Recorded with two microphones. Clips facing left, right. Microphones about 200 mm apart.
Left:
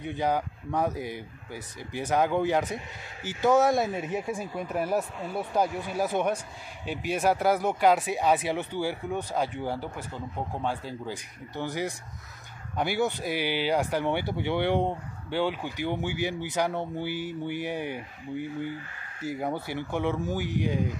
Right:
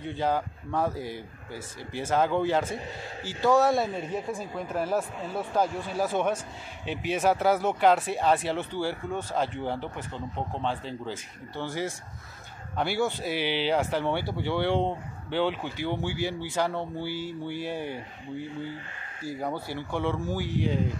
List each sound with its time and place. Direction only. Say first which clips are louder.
0.0 s speech: even; 15° left (ahead or behind)
5.9 s speech: even; 15° left (ahead or behind)
19.5 s speech: left 1 dB; 20° left (ahead or behind)